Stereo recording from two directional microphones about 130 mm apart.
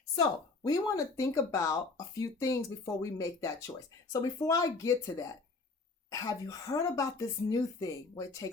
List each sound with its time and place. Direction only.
0.7 s speech: 25° left (ahead or behind)